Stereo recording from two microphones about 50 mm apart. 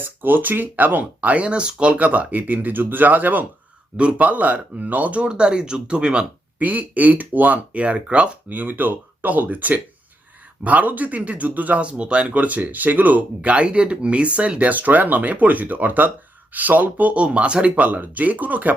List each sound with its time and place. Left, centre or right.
0.0 s speech: right
5.2 s speech: centre
6.6 s speech: right